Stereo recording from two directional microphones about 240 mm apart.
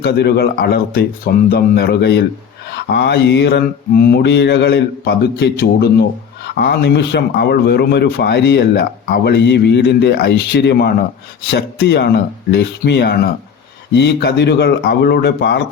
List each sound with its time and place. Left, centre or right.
0.0 s speech: left